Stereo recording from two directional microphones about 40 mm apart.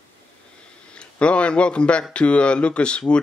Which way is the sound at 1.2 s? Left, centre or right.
Left.